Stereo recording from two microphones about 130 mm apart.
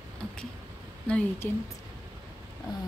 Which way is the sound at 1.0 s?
10° left (ahead or behind).